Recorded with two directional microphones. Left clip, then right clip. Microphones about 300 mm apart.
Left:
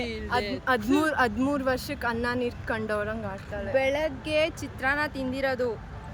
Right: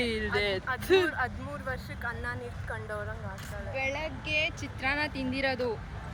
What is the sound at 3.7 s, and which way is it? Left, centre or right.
Speech, centre.